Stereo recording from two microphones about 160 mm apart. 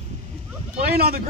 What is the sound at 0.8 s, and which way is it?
Speech, 75° right (ahead or behind).